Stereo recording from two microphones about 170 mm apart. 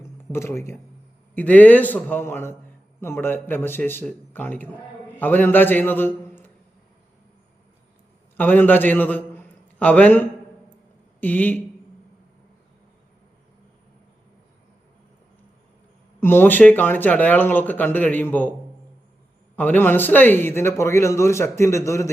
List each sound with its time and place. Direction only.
0.2 s a man's voice: 15° left (ahead or behind)
8.4 s a man's voice: 10° left (ahead or behind)
16.2 s a man's voice: 10° left (ahead or behind)
19.5 s a man's voice: 10° left (ahead or behind)